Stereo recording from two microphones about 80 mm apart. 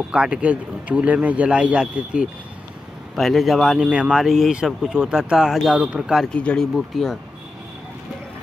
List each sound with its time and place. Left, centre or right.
0.1 s speech: centre
3.2 s speech: centre
6.3 s speech: centre